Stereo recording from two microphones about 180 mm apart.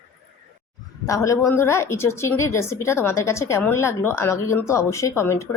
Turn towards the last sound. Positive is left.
turn(degrees=15)  # may be behind; listen again after turning